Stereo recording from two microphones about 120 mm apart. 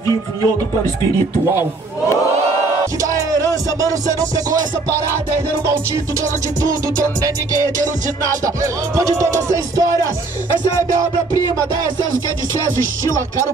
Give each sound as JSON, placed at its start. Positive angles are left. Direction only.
{"t": 3.2, "sound": "music", "side_deg": -30}
{"t": 8.9, "sound": "music", "side_deg": -25}